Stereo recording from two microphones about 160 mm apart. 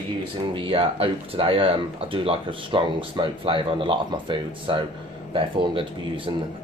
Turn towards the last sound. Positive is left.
turn(degrees=-35)  # may be behind; listen again after turning